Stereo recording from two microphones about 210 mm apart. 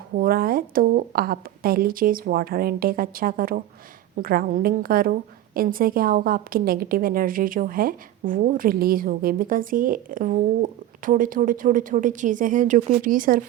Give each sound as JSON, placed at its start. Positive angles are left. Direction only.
{"t": 0.2, "sound": "a woman's voice", "side_deg": -45}